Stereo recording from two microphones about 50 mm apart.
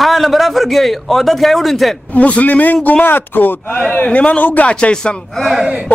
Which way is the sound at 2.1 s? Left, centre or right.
Left.